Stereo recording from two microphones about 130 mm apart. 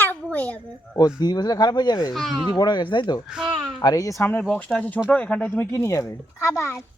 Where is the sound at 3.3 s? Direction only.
5° right (ahead or behind).